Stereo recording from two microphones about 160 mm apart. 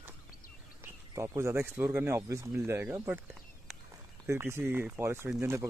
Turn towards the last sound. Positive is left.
turn(degrees=-15)  # may be behind; listen again after turning